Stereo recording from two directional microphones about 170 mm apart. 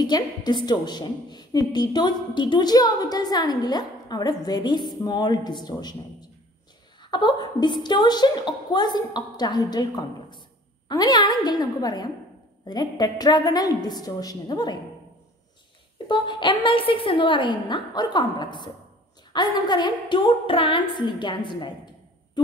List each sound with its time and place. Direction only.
0.0 s a woman's voice: 25° left (ahead or behind)
16.1 s a woman's voice: 25° left (ahead or behind)